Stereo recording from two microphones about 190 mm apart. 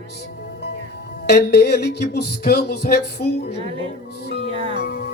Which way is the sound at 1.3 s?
60° left (ahead or behind).